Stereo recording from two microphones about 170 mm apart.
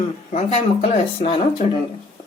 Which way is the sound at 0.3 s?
40° left (ahead or behind).